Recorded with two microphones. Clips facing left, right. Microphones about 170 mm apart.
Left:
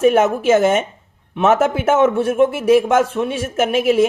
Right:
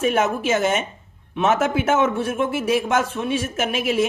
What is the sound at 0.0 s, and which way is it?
A man's voice, 50° left (ahead or behind).